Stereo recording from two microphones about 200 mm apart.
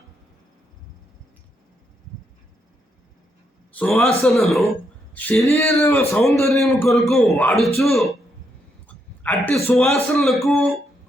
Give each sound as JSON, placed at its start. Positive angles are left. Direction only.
{"t": 3.7, "sound": "a man's voice", "side_deg": 5}
{"t": 9.2, "sound": "speech", "side_deg": 5}